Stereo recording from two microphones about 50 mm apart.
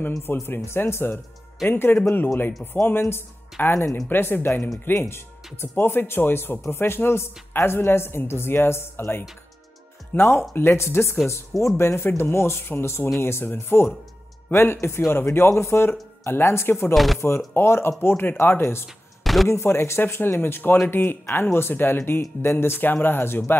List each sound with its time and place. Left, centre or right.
0.3 s speech: left
0.7 s speech: left
1.7 s speech: left
3.6 s speech: left
14.5 s speech: left
16.9 s speech: centre
17.6 s speech: left
19.2 s a sound: centre
19.5 s speech: left
20.1 s speech: left